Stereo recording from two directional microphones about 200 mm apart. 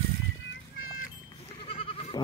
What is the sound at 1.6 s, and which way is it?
Goat, 30° left (ahead or behind).